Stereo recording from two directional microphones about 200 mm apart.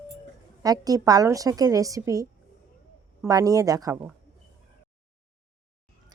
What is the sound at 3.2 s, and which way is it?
Speech, 15° right (ahead or behind).